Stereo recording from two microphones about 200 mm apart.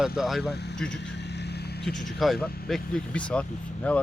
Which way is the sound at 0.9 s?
60° left (ahead or behind).